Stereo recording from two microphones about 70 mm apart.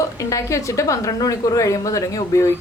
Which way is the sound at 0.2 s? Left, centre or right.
Left.